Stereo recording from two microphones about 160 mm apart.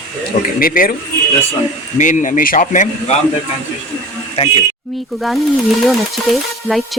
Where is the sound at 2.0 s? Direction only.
50° left (ahead or behind).